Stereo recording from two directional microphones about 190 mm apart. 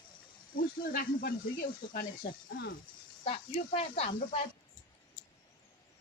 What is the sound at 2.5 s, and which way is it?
Speech, 75° left (ahead or behind).